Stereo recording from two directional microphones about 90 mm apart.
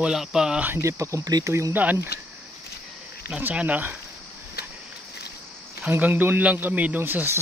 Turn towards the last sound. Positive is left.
turn(degrees=-25)  # may be behind; listen again after turning